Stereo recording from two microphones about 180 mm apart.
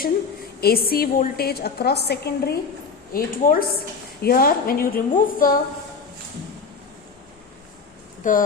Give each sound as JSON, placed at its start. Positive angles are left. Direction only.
{"t": 0.6, "sound": "a woman's voice", "side_deg": 60}
{"t": 3.1, "sound": "a woman's voice", "side_deg": 50}
{"t": 8.2, "sound": "speech", "side_deg": 50}